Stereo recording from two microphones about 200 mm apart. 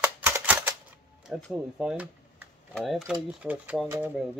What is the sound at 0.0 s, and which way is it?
Typewriter, 10° right (ahead or behind).